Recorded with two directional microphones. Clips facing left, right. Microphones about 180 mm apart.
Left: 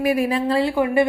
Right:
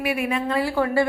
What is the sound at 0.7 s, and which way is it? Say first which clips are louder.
Speech: left 3 dB; 15° left (ahead or behind).